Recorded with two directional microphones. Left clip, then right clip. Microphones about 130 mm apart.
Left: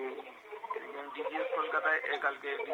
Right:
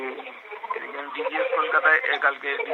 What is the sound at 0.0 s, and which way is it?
Speech, 35° right (ahead or behind).